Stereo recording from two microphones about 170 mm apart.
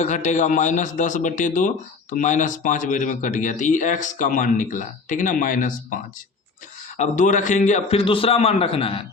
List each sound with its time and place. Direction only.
0.0 s a man's voice: 45° left (ahead or behind)